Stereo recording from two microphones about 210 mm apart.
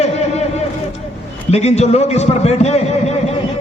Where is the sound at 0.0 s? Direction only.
30° left (ahead or behind).